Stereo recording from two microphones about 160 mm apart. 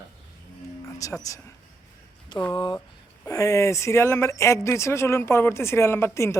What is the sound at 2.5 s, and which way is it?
Speech, 30° left (ahead or behind).